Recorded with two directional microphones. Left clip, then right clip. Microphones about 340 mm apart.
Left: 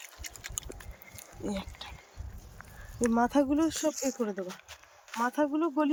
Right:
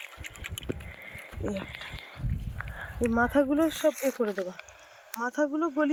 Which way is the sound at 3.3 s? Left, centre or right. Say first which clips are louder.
Right 2 dB; centre.